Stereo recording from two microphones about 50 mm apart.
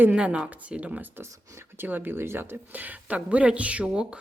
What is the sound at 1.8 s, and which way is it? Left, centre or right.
Speech, right.